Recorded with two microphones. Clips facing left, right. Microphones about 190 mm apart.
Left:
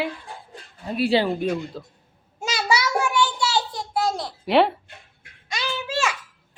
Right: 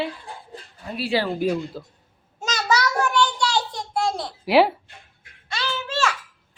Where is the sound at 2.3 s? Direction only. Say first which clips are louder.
Right 1 dB; 10° left (ahead or behind).